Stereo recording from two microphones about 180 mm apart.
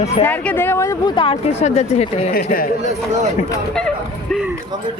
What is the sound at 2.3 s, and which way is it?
Speech, 55° left (ahead or behind).